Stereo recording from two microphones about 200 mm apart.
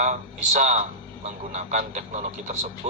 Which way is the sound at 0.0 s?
40° right (ahead or behind).